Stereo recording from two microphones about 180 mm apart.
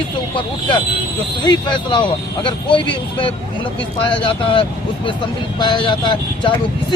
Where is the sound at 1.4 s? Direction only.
25° left (ahead or behind).